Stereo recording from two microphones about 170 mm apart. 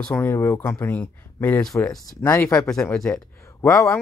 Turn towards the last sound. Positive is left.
turn(degrees=15)  # may be behind; listen again after turning